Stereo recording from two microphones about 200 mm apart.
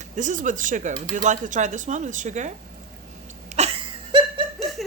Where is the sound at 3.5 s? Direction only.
35° right (ahead or behind).